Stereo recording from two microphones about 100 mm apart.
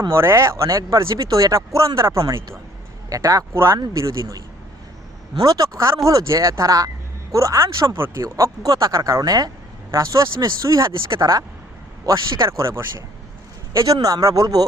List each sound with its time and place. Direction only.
0.1 s speech: 25° right (ahead or behind)
5.4 s speech: 35° right (ahead or behind)
13.7 s speech: 35° right (ahead or behind)